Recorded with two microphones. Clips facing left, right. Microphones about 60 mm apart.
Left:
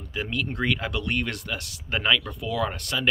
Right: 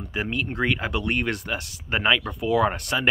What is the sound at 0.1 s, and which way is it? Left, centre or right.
Speech, right.